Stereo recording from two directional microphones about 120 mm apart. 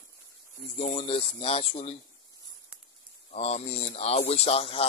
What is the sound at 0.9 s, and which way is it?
Speech, 50° left (ahead or behind).